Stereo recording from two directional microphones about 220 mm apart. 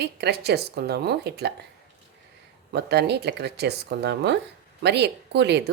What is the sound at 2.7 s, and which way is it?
Speech, 50° right (ahead or behind).